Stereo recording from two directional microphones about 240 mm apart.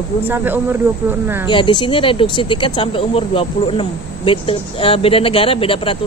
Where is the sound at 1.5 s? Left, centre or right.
Centre.